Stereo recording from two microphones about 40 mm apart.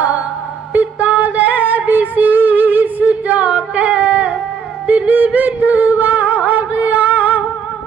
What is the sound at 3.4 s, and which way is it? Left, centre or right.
Singing, right.